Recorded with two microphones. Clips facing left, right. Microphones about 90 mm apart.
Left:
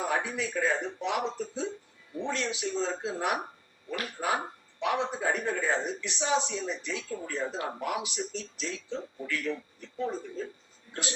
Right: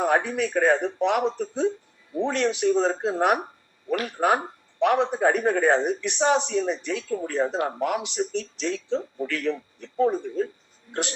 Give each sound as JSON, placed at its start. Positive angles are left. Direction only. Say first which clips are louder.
{"t": 0.0, "sound": "a man's voice", "louder": "right 8 dB", "side_deg": -60}